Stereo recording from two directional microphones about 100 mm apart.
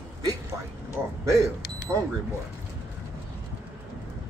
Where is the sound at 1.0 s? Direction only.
25° right (ahead or behind).